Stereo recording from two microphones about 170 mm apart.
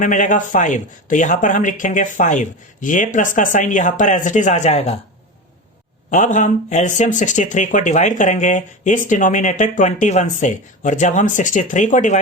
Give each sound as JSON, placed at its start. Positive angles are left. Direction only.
{"t": 0.0, "sound": "speech", "side_deg": 50}
{"t": 6.1, "sound": "speech", "side_deg": 45}